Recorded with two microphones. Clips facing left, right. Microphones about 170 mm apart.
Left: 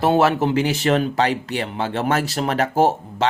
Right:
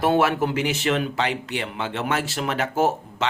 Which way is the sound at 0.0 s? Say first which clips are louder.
Left 3 dB; 30° left (ahead or behind).